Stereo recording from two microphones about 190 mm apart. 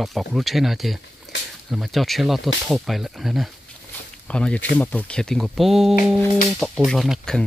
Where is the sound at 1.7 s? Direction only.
Centre (ahead or behind).